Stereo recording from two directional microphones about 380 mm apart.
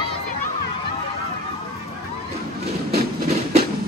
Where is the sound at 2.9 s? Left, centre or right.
Centre.